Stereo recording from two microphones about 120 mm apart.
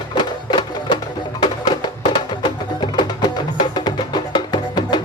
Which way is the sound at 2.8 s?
35° left (ahead or behind).